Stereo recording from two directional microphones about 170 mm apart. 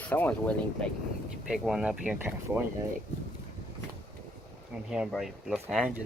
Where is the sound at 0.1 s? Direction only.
10° left (ahead or behind).